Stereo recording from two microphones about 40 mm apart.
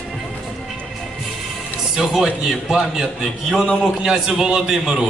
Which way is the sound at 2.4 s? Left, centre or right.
Centre.